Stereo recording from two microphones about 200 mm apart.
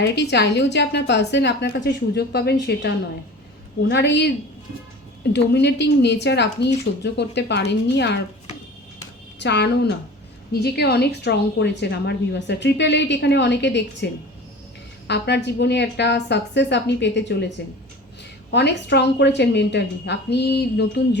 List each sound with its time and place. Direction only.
0.0 s a woman's voice: 60° left (ahead or behind)
3.8 s a woman's voice: 60° left (ahead or behind)
5.3 s a woman's voice: 60° left (ahead or behind)
9.4 s a woman's voice: 60° left (ahead or behind)